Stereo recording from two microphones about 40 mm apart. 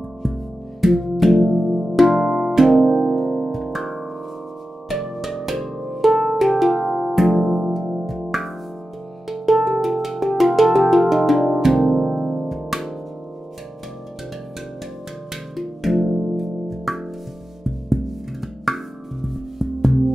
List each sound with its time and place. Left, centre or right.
0.2 s music: centre
7.8 s music: centre
8.3 s music: centre
15.5 s music: centre